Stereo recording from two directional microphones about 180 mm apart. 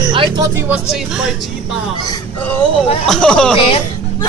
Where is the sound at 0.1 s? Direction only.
30° right (ahead or behind).